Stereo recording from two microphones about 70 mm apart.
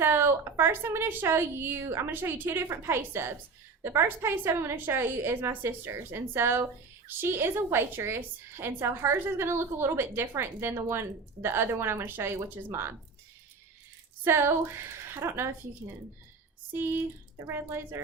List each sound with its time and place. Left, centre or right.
0.0 s a woman's voice: right
14.3 s a woman's voice: right
16.7 s a woman's voice: right